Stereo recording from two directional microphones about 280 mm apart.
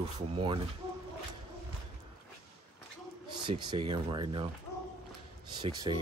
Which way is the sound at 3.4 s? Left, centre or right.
Centre.